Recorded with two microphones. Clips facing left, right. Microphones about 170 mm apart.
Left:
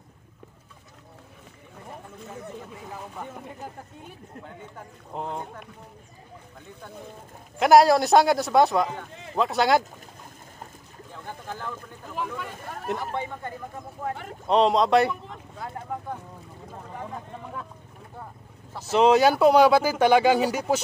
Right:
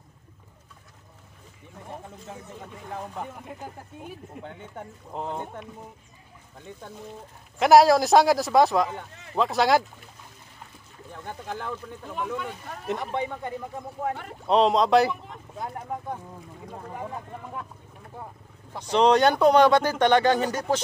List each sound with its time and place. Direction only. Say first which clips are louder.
5.1 s speech: even; centre (ahead or behind)
7.5 s speech: even; centre (ahead or behind)
12.2 s speech: right 1 dB; centre (ahead or behind)
13.1 s speech: right 2 dB; 15° right (ahead or behind)
14.1 s speech: even; centre (ahead or behind)
18.8 s speech: left 1 dB; 5° left (ahead or behind)